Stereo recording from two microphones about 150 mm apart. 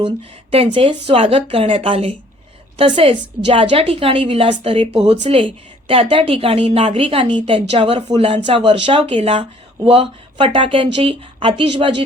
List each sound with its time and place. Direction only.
0.5 s speech: 40° right (ahead or behind)